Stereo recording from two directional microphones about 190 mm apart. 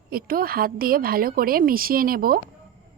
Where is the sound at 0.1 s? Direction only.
50° right (ahead or behind).